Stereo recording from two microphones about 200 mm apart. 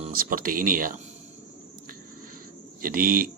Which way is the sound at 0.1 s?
45° right (ahead or behind).